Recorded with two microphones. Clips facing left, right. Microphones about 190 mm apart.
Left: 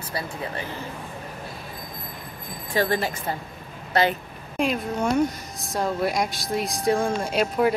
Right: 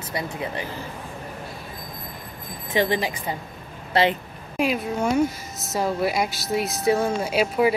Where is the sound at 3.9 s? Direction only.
30° right (ahead or behind).